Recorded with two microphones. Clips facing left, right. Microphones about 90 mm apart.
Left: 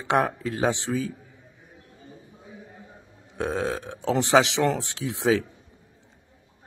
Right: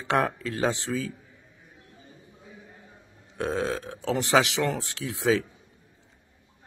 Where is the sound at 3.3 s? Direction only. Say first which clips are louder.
Left 1 dB; 20° left (ahead or behind).